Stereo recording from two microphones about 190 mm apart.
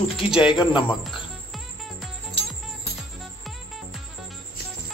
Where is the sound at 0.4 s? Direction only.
25° left (ahead or behind).